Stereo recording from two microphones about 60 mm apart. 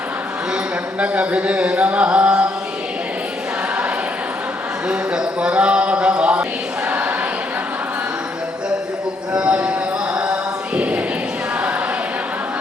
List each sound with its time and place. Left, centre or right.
0.9 s music: right
4.9 s speech: centre
9.3 s a sound: centre
10.8 s clip-clop: centre